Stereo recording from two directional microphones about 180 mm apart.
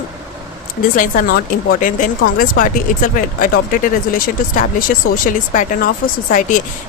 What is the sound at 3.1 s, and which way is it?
Speech, 50° left (ahead or behind).